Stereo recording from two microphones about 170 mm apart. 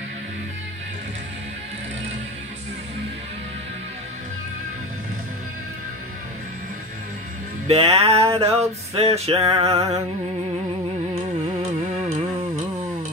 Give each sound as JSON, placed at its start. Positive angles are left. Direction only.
{"t": 7.6, "sound": "music", "side_deg": -35}